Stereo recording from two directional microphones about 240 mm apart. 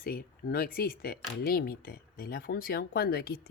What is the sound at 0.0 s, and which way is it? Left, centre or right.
Speech, left.